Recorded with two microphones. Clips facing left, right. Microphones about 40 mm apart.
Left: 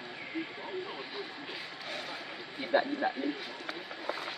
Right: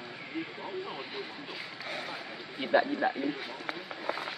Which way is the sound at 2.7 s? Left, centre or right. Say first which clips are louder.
Right 2 dB; right.